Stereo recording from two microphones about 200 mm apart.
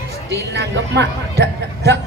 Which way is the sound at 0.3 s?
60° right (ahead or behind).